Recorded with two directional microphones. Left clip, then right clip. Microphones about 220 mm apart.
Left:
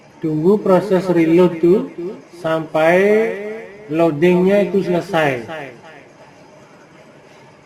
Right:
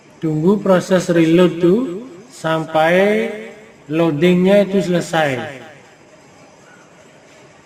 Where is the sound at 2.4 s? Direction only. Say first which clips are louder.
Even; 50° right (ahead or behind).